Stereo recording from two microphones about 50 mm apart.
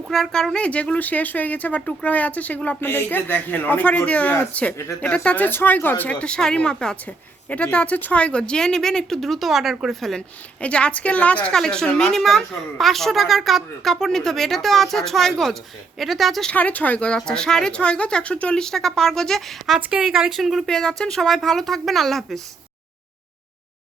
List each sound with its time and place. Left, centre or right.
0.1 s a woman's voice: centre
0.6 s a man's voice: left
2.8 s a man's voice: left
5.5 s a man's voice: left
6.1 s a woman's voice: centre
10.2 s a woman's voice: left
11.5 s a woman's voice: centre
16.5 s a man's voice: left
17.2 s a woman's voice: centre
18.6 s a woman's voice: centre
19.7 s speech: centre
20.4 s a woman's voice: centre
21.2 s a woman's voice: centre